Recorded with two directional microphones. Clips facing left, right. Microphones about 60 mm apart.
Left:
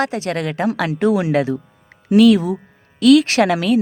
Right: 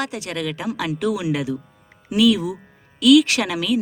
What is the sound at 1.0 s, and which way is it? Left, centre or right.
A woman's voice, left.